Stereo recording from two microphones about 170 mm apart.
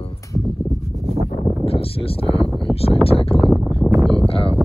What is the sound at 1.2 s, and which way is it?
Speech, 35° left (ahead or behind).